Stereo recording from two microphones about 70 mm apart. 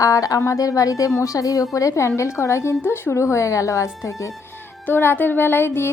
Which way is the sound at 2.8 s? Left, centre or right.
Left.